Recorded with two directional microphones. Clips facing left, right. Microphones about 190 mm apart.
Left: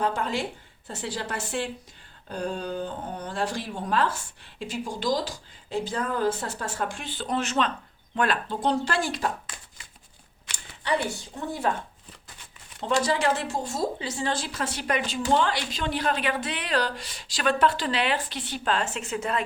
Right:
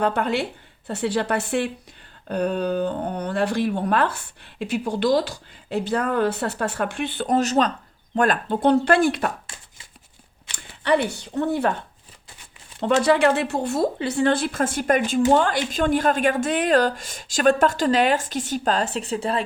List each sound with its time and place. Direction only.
0.0 s speech: 65° right (ahead or behind)
7.3 s speech: 40° right (ahead or behind); by 9.3 s 60° right (ahead or behind)
10.8 s speech: 65° right (ahead or behind)
12.8 s a woman's voice: 60° right (ahead or behind); by 19.5 s 30° right (ahead or behind)